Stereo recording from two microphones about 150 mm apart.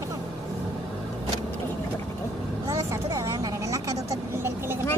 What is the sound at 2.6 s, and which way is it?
Vehicle, 25° right (ahead or behind).